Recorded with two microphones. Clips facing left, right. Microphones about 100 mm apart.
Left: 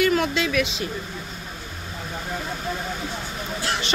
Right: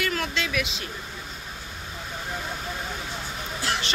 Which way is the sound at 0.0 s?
15° left (ahead or behind).